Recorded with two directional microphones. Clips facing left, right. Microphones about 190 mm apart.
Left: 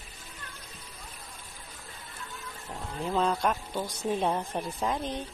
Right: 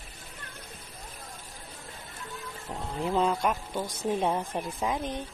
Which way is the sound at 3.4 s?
Centre (ahead or behind).